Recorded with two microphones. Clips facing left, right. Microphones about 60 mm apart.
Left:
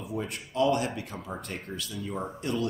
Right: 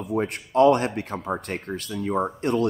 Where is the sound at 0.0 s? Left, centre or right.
Right.